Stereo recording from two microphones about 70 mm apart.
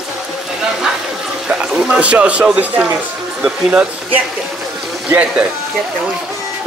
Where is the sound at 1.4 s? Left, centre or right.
Centre.